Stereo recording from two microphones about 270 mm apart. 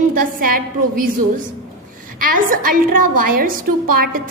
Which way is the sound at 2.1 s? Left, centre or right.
Right.